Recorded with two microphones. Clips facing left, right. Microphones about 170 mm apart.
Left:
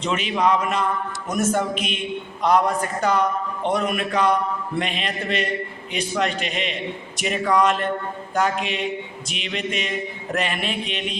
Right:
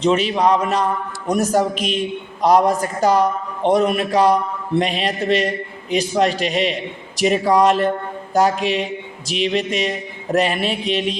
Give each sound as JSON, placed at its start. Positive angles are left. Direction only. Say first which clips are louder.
{"t": 0.0, "sound": "a man's voice", "louder": "right 5 dB", "side_deg": -35}
{"t": 8.3, "sound": "a sound", "louder": "right 6 dB", "side_deg": -35}
{"t": 8.6, "sound": "a man's voice", "louder": "right 5 dB", "side_deg": -35}